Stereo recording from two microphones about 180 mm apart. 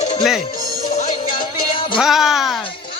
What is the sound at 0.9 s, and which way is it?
Music, 45° left (ahead or behind).